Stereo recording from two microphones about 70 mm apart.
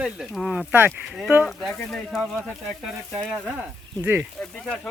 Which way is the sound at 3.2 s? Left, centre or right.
Centre.